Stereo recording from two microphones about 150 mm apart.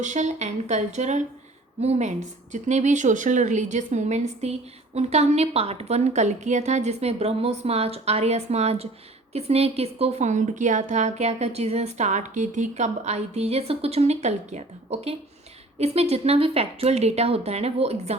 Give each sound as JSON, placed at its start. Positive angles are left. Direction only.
{"t": 0.0, "sound": "a woman's voice", "side_deg": -50}